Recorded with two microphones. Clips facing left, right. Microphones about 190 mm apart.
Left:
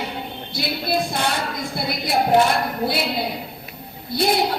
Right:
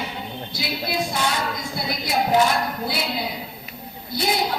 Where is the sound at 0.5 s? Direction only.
55° left (ahead or behind).